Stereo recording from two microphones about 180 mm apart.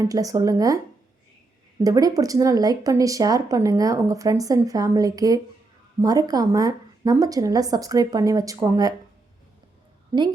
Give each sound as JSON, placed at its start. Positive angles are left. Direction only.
{"t": 0.0, "sound": "speech", "side_deg": -20}
{"t": 1.8, "sound": "speech", "side_deg": -20}
{"t": 10.1, "sound": "a woman's voice", "side_deg": -20}